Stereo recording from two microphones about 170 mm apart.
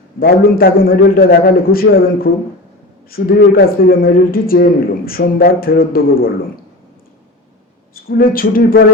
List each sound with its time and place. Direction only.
0.2 s a man's voice: 60° left (ahead or behind)
8.0 s a man's voice: 60° left (ahead or behind)